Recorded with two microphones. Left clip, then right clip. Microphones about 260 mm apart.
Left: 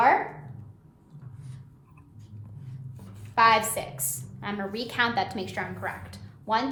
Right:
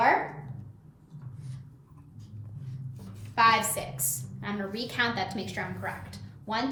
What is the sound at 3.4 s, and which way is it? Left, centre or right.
A woman's voice, left.